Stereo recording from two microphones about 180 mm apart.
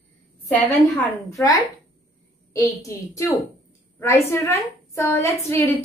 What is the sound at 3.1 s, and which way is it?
A woman's voice, 15° left (ahead or behind).